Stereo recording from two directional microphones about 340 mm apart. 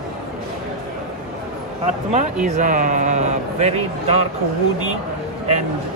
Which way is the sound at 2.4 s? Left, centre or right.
Right.